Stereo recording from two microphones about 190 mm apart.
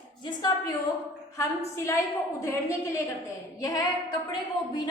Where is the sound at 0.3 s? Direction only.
20° left (ahead or behind).